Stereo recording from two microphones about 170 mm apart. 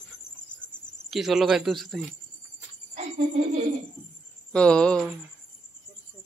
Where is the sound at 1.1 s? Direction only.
Centre (ahead or behind).